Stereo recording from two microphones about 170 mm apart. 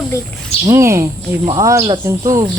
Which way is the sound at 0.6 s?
15° right (ahead or behind).